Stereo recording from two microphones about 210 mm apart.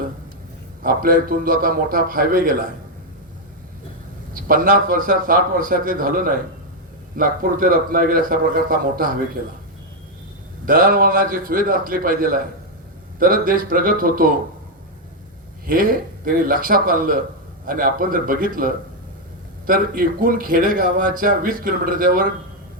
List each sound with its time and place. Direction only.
0.8 s a man's voice: 45° right (ahead or behind)
4.4 s speech: 40° right (ahead or behind)
10.7 s speech: 40° right (ahead or behind)
15.6 s speech: 40° right (ahead or behind)